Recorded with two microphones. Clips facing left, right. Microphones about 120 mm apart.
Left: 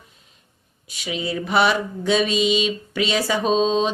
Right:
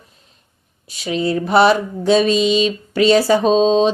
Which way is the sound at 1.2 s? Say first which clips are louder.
Right 6 dB; 35° right (ahead or behind).